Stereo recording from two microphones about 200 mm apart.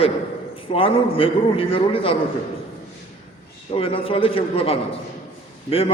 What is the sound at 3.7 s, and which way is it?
A man's voice, 25° left (ahead or behind).